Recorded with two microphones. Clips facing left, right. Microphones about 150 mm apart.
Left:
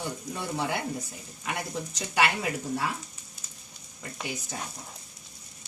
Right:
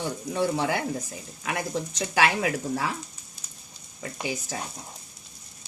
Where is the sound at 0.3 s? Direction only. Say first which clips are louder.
Right 6 dB; 90° right.